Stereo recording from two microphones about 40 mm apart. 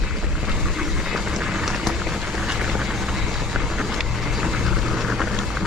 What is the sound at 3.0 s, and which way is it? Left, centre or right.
Vehicle, centre.